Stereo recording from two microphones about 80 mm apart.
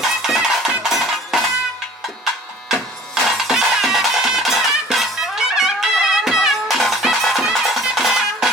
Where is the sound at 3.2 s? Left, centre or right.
Centre.